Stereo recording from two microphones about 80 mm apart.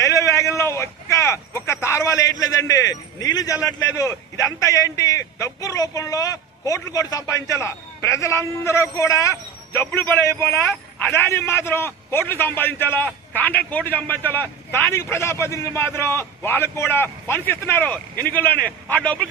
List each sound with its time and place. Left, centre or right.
0.0 s speech: left
9.9 s a man's voice: left
10.2 s a man's voice: left